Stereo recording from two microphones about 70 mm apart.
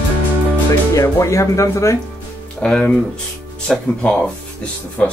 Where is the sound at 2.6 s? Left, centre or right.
Centre.